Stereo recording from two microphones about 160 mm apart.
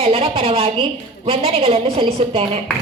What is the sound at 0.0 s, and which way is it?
A woman's voice, 35° right (ahead or behind).